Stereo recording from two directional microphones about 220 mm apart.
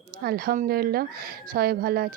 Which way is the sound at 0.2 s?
45° right (ahead or behind).